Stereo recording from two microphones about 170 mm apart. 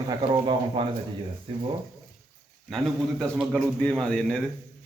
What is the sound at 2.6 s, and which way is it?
A man's voice, 5° left (ahead or behind).